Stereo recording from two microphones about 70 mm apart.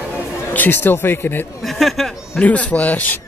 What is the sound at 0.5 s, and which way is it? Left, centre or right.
Speech, left.